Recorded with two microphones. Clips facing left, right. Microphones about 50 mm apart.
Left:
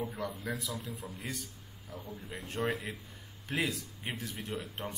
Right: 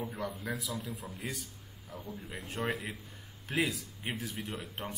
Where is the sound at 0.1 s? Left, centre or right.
Centre.